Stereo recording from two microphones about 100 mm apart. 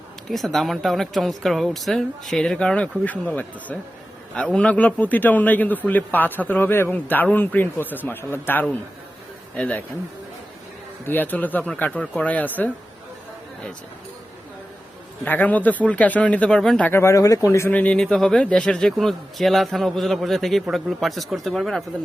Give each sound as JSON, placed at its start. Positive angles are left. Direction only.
{"t": 0.3, "sound": "a man's voice", "side_deg": 0}
{"t": 11.0, "sound": "a man's voice", "side_deg": 20}
{"t": 15.2, "sound": "a man's voice", "side_deg": 15}
{"t": 16.9, "sound": "speech", "side_deg": 25}
{"t": 17.7, "sound": "a man's voice", "side_deg": 15}